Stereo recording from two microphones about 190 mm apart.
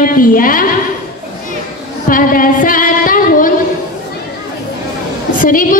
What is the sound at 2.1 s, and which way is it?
Singing, 45° left (ahead or behind).